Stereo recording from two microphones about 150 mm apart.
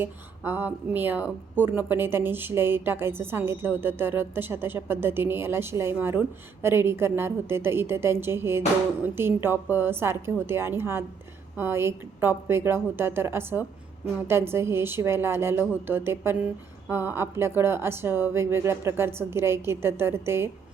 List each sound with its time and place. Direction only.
0.0 s speech: 15° right (ahead or behind)